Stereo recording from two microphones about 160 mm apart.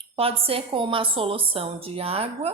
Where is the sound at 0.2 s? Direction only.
35° right (ahead or behind).